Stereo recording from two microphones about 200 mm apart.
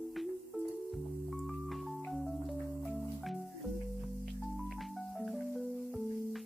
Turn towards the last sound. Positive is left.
turn(degrees=0)  # may be behind; listen again after turning